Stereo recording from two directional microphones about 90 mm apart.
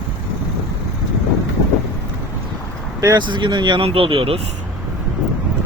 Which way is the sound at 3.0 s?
55° right (ahead or behind).